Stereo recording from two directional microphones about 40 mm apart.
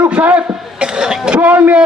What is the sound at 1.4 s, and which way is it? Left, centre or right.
Speech, right.